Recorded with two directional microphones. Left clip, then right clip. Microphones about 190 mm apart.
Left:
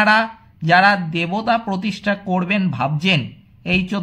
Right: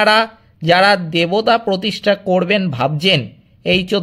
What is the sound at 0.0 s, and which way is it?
Speech, 35° right (ahead or behind).